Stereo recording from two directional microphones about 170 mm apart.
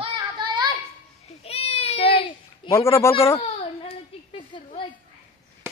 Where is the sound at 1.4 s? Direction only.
35° left (ahead or behind).